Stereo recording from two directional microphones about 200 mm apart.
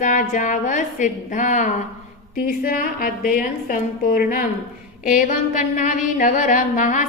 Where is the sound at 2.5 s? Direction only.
45° left (ahead or behind).